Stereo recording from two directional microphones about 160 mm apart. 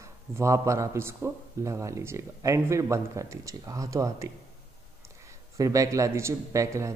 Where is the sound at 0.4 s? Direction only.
20° right (ahead or behind).